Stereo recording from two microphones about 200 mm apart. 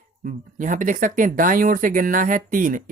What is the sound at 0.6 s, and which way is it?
Speech, 40° right (ahead or behind).